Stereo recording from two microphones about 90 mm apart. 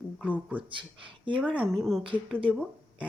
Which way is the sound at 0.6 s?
70° right (ahead or behind).